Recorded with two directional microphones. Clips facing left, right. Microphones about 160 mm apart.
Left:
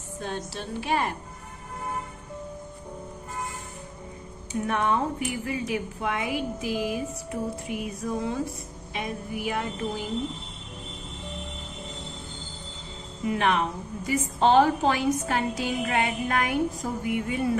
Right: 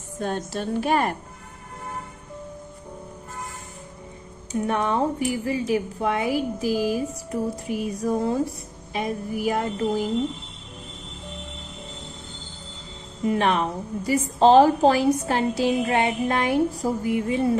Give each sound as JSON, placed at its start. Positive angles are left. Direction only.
{"t": 0.2, "sound": "a woman's voice", "side_deg": -50}
{"t": 4.6, "sound": "a woman's voice", "side_deg": -35}
{"t": 13.2, "sound": "a woman's voice", "side_deg": -40}